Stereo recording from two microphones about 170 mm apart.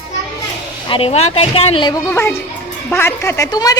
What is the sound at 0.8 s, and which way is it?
Speech, 35° left (ahead or behind).